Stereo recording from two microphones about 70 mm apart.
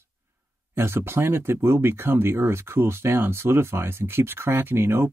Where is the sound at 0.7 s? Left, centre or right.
Right.